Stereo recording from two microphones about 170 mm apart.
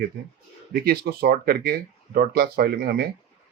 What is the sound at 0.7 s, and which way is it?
Speech, 60° right (ahead or behind).